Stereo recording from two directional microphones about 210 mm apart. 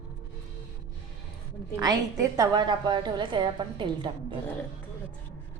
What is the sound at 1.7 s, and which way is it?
A woman's voice, 15° right (ahead or behind).